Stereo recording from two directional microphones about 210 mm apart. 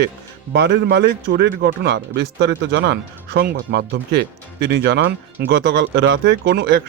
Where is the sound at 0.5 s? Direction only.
55° right (ahead or behind).